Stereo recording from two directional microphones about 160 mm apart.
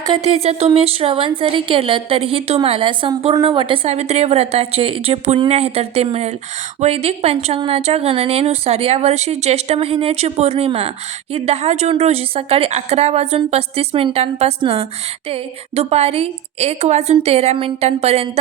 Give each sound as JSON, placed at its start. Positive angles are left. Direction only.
{"t": 0.2, "sound": "speech", "side_deg": -40}